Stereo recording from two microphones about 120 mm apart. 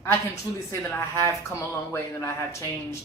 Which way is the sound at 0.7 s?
20° left (ahead or behind).